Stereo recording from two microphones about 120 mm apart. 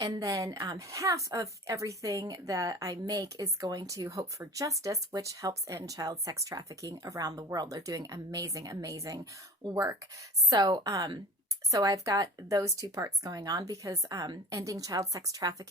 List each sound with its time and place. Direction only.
0.0 s a woman's voice: 30° right (ahead or behind)